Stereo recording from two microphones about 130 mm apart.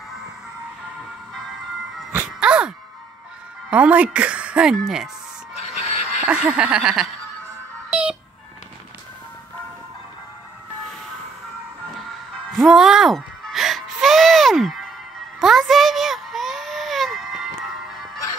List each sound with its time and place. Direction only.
2.1 s music: 5° right (ahead or behind)
3.7 s speech: 10° right (ahead or behind)
5.6 s music: 55° left (ahead or behind)
6.2 s speech: 10° right (ahead or behind)
7.9 s telephone dialing: 5° right (ahead or behind)
12.4 s music: centre (ahead or behind)
15.4 s baby cry: centre (ahead or behind)